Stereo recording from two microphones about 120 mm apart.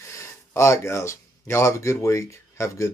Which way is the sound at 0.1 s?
25° left (ahead or behind).